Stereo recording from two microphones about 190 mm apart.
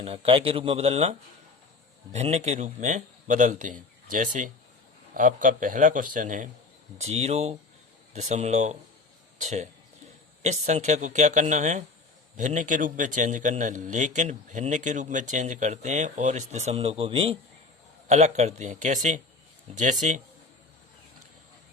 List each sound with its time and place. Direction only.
0.0 s a man's voice: 30° right (ahead or behind)
2.1 s a man's voice: 35° right (ahead or behind)